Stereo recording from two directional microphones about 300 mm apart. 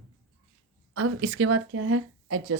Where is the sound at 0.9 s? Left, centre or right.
Right.